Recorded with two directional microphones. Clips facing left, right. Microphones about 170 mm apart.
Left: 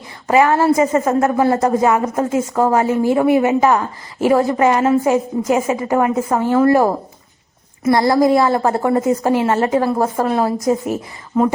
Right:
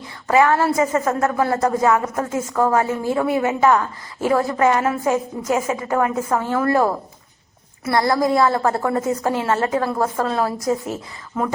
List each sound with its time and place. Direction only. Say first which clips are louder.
0.3 s a woman's voice: left 3 dB; 20° left (ahead or behind)